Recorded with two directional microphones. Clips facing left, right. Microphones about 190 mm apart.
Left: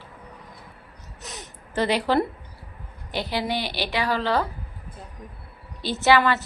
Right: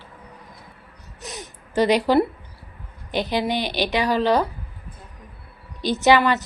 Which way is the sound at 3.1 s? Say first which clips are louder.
Right 4 dB; 20° right (ahead or behind).